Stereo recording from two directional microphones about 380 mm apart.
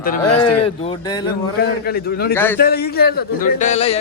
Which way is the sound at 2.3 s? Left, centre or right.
Centre.